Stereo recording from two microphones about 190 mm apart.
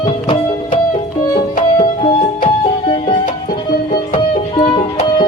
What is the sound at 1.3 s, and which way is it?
Music, 50° left (ahead or behind).